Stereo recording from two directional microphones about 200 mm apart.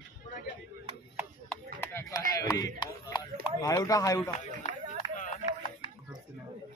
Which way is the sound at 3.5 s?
15° left (ahead or behind).